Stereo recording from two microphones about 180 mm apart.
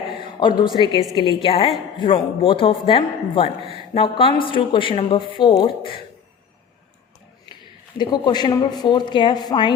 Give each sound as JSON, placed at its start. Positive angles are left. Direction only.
{"t": 0.2, "sound": "a sound", "side_deg": 25}
{"t": 1.1, "sound": "speech", "side_deg": 25}
{"t": 3.6, "sound": "speech", "side_deg": -30}
{"t": 3.9, "sound": "speech", "side_deg": 30}
{"t": 7.9, "sound": "speech", "side_deg": 25}